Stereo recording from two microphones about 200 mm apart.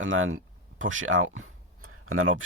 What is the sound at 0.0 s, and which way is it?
Speech, 85° right.